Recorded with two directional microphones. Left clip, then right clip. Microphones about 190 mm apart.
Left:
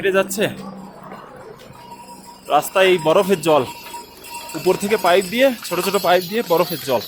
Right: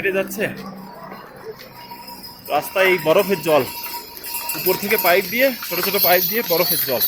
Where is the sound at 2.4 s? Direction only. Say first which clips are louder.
Left 3 dB; 35° left (ahead or behind).